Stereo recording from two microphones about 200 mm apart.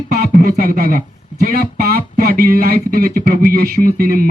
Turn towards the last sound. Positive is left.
turn(degrees=-45)  # may be behind; listen again after turning